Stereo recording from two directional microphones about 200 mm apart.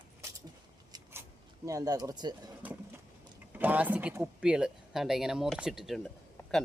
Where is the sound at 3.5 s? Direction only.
10° right (ahead or behind).